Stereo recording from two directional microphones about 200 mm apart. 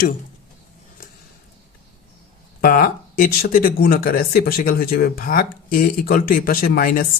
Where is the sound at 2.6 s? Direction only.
45° left (ahead or behind).